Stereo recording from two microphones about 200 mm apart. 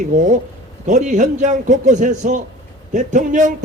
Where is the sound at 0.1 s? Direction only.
35° right (ahead or behind).